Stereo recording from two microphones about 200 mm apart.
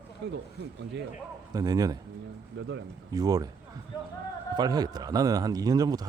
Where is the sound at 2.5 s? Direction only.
65° right (ahead or behind).